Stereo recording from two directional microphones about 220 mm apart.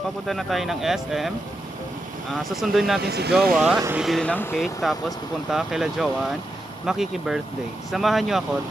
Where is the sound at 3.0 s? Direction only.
45° right (ahead or behind).